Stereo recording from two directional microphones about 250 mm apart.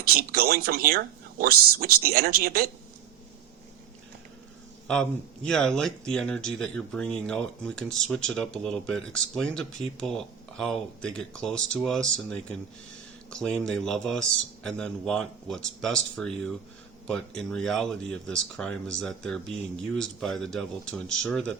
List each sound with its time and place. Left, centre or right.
0.1 s a man's voice: right
4.9 s speech: centre